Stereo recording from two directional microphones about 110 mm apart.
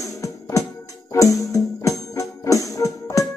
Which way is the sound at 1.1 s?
30° left (ahead or behind).